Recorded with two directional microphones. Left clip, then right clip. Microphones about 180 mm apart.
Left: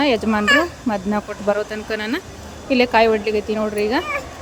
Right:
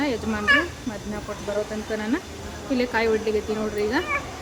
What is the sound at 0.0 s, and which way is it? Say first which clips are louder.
Speech: left 7 dB; 40° left (ahead or behind).